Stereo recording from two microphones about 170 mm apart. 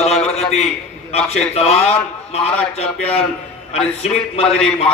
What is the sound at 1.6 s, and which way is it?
A man's voice, 35° left (ahead or behind).